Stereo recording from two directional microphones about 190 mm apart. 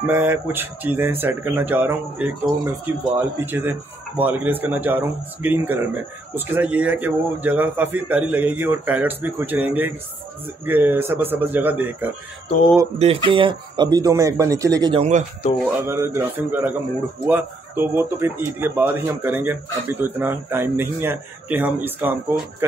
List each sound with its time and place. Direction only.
0.0 s speech: 10° right (ahead or behind)
13.0 s speech: 30° right (ahead or behind)
15.0 s speech: 40° right (ahead or behind)
15.6 s speech: 15° right (ahead or behind)